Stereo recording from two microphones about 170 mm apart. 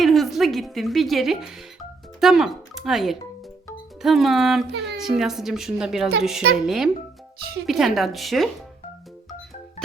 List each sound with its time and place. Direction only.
0.0 s a woman's voice: centre (ahead or behind)
4.7 s speech: 85° right
4.9 s a woman's voice: centre (ahead or behind)